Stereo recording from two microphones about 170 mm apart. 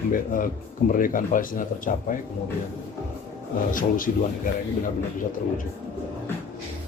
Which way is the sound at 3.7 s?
55° left (ahead or behind).